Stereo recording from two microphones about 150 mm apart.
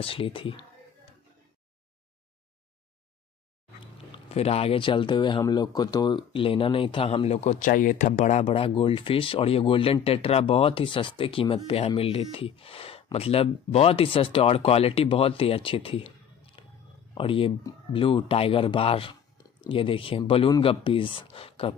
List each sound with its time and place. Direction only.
0.0 s speech: 35° left (ahead or behind)
3.8 s speech: 40° left (ahead or behind)
16.6 s a sound: 35° left (ahead or behind)
17.1 s speech: 35° left (ahead or behind)